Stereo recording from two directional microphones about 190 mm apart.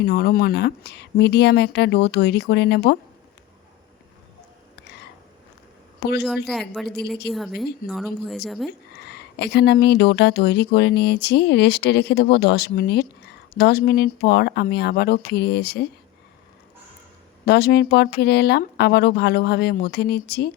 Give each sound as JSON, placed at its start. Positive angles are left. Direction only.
{"t": 0.0, "sound": "speech", "side_deg": 55}
{"t": 6.0, "sound": "a woman's voice", "side_deg": 60}
{"t": 6.2, "sound": "a woman's voice", "side_deg": 0}
{"t": 9.0, "sound": "speech", "side_deg": 60}
{"t": 17.4, "sound": "speech", "side_deg": 60}